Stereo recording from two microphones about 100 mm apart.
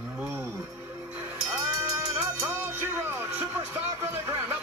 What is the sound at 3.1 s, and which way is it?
Music, 20° right (ahead or behind).